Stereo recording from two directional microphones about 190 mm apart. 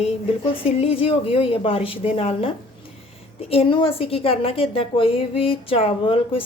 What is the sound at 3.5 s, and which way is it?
A woman's voice, 30° left (ahead or behind).